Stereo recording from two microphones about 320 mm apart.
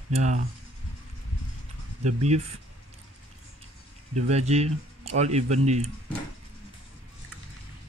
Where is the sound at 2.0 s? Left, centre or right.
Right.